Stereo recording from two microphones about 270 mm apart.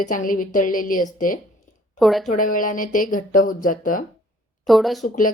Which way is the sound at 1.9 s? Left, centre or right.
Centre.